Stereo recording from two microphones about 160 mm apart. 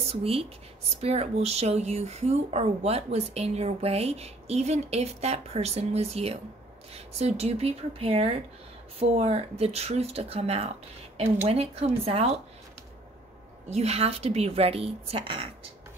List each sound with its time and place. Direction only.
0.1 s speech: 35° right (ahead or behind)
13.7 s speech: 40° right (ahead or behind)